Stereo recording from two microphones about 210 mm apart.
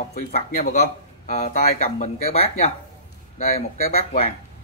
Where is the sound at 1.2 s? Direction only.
35° left (ahead or behind).